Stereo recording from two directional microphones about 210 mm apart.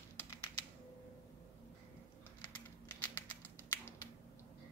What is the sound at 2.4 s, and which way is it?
Crumpling, 20° left (ahead or behind).